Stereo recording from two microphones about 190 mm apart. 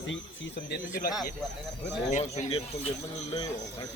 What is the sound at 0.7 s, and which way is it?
Speech, 50° left (ahead or behind).